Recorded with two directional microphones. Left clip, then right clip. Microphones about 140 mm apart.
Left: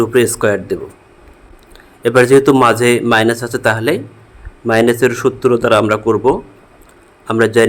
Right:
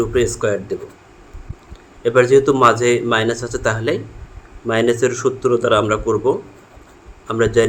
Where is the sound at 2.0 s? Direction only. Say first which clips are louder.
Left 3 dB; 65° left (ahead or behind).